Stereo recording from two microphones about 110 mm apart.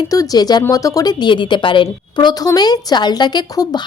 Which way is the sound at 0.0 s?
35° left (ahead or behind).